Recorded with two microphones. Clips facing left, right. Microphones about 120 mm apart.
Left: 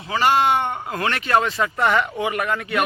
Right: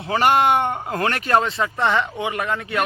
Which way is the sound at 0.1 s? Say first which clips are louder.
Right 1 dB; 55° right (ahead or behind).